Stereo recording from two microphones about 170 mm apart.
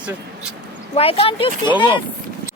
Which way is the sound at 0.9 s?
35° left (ahead or behind).